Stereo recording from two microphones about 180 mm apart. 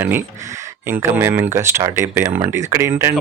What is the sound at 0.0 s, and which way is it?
Speech, 10° right (ahead or behind).